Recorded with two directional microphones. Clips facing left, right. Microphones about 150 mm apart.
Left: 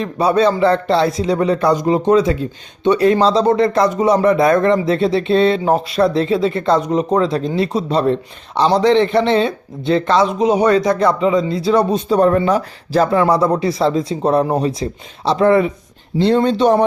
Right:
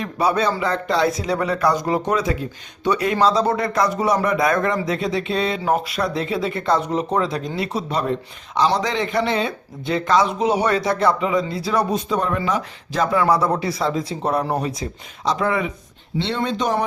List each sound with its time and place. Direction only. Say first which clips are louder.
0.0 s speech: left 6 dB; 25° left (ahead or behind)